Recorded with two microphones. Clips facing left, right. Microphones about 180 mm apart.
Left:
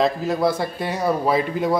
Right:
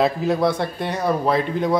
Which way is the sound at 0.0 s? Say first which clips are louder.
Right 1 dB; centre (ahead or behind).